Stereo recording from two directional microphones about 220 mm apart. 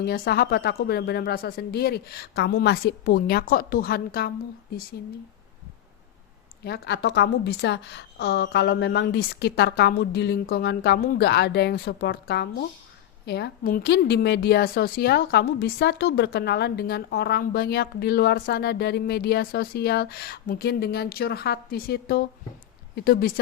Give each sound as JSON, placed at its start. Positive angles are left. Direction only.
{"t": 0.0, "sound": "a woman's voice", "side_deg": 45}
{"t": 6.7, "sound": "a woman's voice", "side_deg": 50}